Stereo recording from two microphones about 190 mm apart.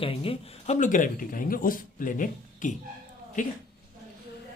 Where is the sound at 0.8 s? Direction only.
45° left (ahead or behind).